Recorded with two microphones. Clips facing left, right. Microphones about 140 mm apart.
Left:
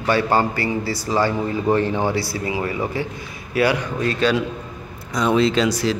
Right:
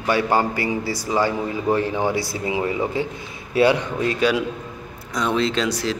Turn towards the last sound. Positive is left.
turn(degrees=0)  # may be behind; listen again after turning